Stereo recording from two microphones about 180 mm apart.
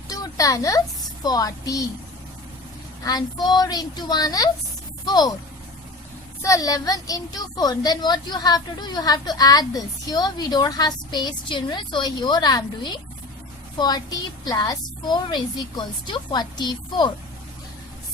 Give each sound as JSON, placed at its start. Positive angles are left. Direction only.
{"t": 0.1, "sound": "a woman's voice", "side_deg": 20}
{"t": 3.0, "sound": "a woman's voice", "side_deg": 20}
{"t": 6.4, "sound": "a woman's voice", "side_deg": 20}